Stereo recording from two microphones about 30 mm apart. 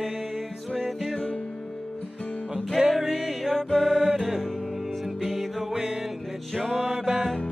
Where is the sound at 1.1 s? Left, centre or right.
Left.